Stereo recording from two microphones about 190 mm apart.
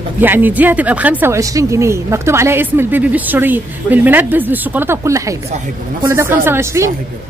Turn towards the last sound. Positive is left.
turn(degrees=-15)  # may be behind; listen again after turning